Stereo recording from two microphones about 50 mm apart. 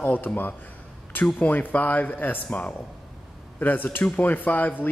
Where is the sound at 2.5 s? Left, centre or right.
Left.